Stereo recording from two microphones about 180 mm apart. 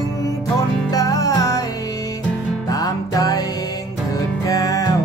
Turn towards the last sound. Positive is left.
turn(degrees=20)  # may be behind; listen again after turning